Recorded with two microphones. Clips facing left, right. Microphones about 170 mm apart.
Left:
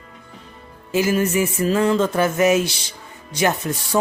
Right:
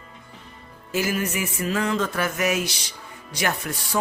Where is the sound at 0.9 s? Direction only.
25° left (ahead or behind).